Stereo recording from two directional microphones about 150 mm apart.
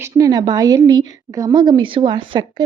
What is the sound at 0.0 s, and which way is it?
A woman's voice, 25° right (ahead or behind).